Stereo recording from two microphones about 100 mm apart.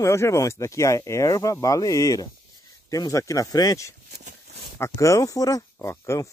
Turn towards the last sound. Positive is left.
turn(degrees=30)  # may be behind; listen again after turning